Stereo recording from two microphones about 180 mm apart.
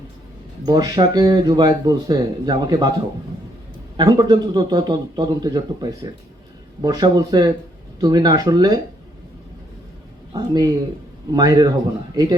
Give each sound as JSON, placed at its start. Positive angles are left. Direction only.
{"t": 0.6, "sound": "speech", "side_deg": -20}
{"t": 10.3, "sound": "speech", "side_deg": -20}